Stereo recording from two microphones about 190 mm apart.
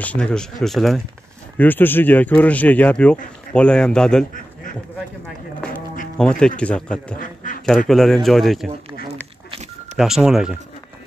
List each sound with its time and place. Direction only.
0.0 s speech: 5° left (ahead or behind)
6.1 s speech: 5° left (ahead or behind)
7.2 s quack: 45° left (ahead or behind)
7.9 s speech: centre (ahead or behind)
9.9 s speech: centre (ahead or behind)